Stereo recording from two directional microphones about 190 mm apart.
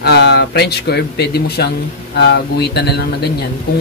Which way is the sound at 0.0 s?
60° left (ahead or behind).